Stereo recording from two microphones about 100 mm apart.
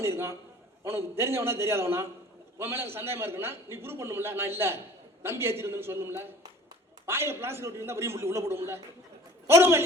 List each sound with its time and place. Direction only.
0.0 s a man's voice: 25° right (ahead or behind)